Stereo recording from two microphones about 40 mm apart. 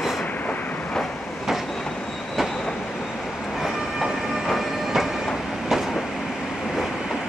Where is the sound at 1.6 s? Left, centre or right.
Centre.